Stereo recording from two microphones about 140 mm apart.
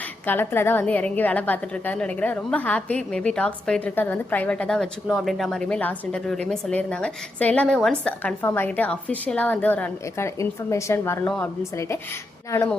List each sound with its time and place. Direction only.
0.3 s a woman's voice: 15° left (ahead or behind)
12.5 s speech: 20° left (ahead or behind)